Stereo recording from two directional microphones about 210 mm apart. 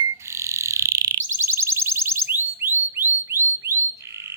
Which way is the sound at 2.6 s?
10° right (ahead or behind).